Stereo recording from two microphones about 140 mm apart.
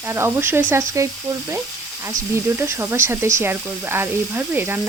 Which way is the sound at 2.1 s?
20° right (ahead or behind).